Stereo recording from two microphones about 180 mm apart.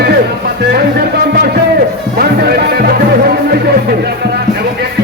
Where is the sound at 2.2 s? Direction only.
60° right (ahead or behind).